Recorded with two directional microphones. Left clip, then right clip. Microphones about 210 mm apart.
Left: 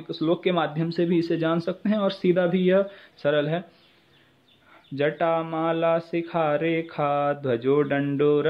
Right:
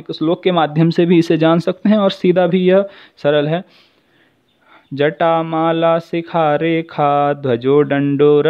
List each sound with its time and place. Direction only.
0.1 s speech: 45° right (ahead or behind)
4.9 s speech: 50° right (ahead or behind)